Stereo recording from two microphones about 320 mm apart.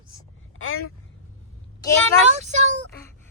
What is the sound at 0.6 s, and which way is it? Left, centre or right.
Speech, left.